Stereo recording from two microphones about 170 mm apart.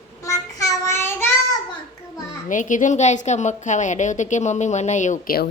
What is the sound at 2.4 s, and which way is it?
A woman's voice, 50° left (ahead or behind).